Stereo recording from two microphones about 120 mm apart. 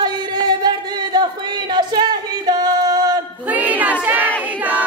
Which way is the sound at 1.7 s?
35° right (ahead or behind).